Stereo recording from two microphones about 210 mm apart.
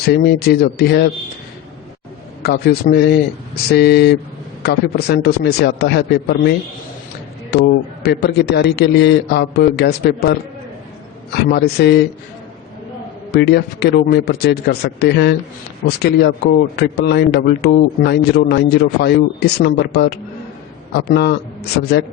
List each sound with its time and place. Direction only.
0.1 s speech: 50° left (ahead or behind)
2.4 s speech: 45° left (ahead or behind)
7.5 s speech: 55° left (ahead or behind)
11.4 s speech: 50° left (ahead or behind)
13.3 s speech: 50° left (ahead or behind)